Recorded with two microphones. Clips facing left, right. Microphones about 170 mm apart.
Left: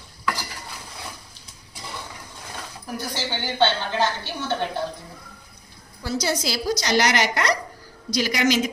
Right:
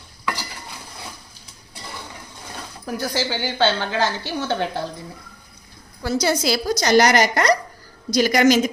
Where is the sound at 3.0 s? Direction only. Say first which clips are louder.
Right 5 dB; 90° right.